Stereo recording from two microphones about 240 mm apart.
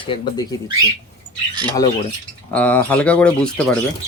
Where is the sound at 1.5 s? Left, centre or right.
Centre.